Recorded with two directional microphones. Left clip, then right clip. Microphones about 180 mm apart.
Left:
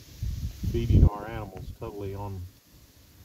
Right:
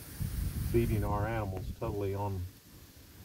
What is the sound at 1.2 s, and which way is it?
Speech, 15° left (ahead or behind).